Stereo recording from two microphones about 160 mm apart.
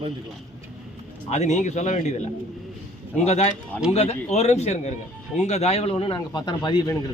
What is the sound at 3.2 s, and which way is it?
Speech, 45° left (ahead or behind).